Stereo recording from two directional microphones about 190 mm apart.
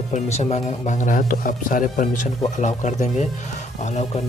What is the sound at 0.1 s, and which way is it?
Speech, 35° left (ahead or behind).